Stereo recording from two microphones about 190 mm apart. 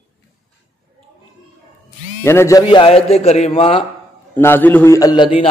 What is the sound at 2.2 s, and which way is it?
Speech, 15° left (ahead or behind).